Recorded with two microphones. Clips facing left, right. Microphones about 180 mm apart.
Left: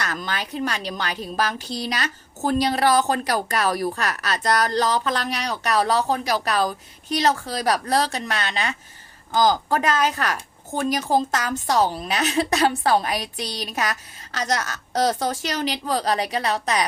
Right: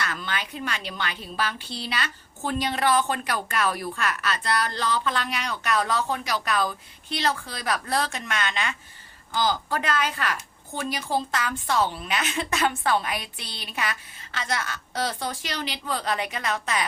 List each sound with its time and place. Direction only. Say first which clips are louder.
0.0 s a woman's voice: left 3 dB; 40° left (ahead or behind)